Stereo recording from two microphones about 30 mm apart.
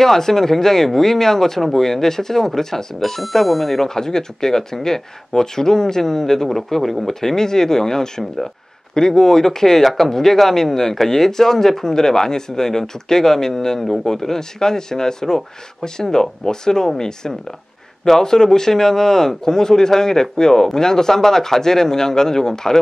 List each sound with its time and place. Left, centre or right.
0.0 s speech: centre
3.2 s speech: centre